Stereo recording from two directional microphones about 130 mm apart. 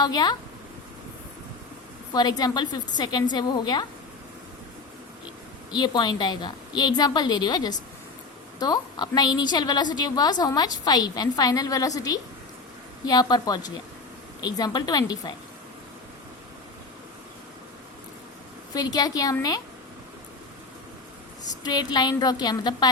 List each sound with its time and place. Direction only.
0.0 s a woman's voice: 30° left (ahead or behind)
2.1 s a woman's voice: 30° left (ahead or behind)
5.7 s a woman's voice: 35° left (ahead or behind)
18.7 s a woman's voice: 30° left (ahead or behind)
21.5 s a woman's voice: 30° left (ahead or behind)